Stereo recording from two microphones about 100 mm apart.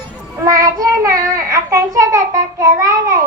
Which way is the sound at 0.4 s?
35° right (ahead or behind).